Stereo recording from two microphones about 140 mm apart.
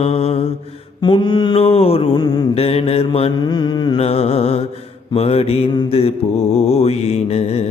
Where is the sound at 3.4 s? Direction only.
30° left (ahead or behind).